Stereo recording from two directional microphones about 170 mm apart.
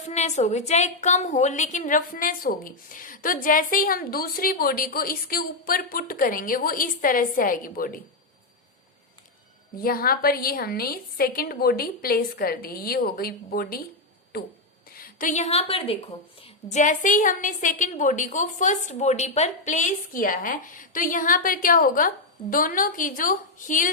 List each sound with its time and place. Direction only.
0.1 s a woman's voice: 40° left (ahead or behind)
9.8 s a woman's voice: 60° left (ahead or behind)
14.9 s a woman's voice: 55° left (ahead or behind); by 16.1 s 35° left (ahead or behind)
16.7 s a woman's voice: 50° left (ahead or behind)